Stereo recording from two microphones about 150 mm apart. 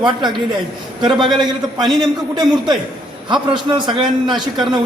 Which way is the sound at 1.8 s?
25° right (ahead or behind).